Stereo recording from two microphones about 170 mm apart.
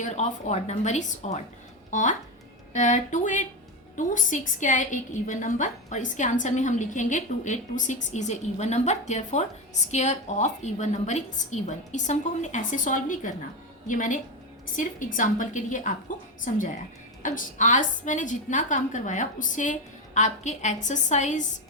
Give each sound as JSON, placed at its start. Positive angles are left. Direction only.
{"t": 0.0, "sound": "a woman's voice", "side_deg": 40}